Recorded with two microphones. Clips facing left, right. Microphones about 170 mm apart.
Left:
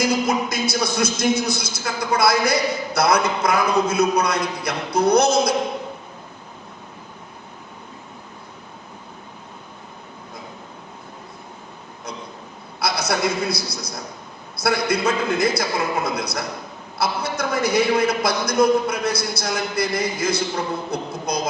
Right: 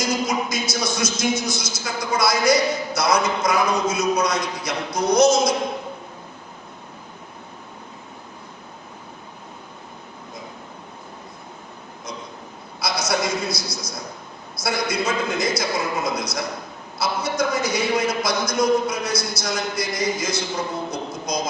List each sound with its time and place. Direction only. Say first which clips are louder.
0.0 s a man's voice: left 3 dB; 60° left (ahead or behind)
12.8 s a man's voice: left 1 dB; 60° left (ahead or behind)